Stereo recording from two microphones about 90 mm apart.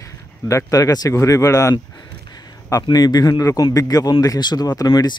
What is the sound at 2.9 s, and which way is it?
A man's voice, 45° left (ahead or behind).